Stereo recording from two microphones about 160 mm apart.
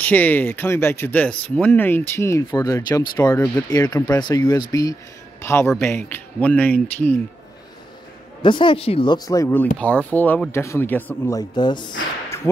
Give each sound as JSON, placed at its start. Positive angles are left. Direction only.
{"t": 0.0, "sound": "speech", "side_deg": 10}
{"t": 8.4, "sound": "speech", "side_deg": 30}
{"t": 11.3, "sound": "speech", "side_deg": 25}